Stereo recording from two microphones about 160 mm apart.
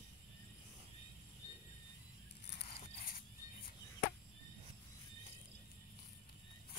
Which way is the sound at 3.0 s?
65° left (ahead or behind).